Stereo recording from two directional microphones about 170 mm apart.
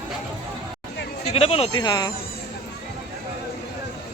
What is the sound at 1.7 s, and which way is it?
Speech, 25° left (ahead or behind).